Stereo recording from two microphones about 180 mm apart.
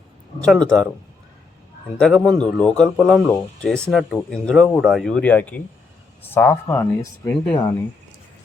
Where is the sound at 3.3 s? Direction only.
5° left (ahead or behind).